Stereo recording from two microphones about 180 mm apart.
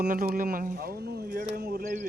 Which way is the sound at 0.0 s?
55° right (ahead or behind).